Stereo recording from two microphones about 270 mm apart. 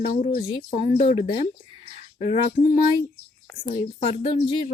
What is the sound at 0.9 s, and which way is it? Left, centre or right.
Speech, left.